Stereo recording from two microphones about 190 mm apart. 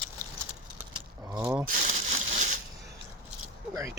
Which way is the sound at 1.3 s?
20° right (ahead or behind).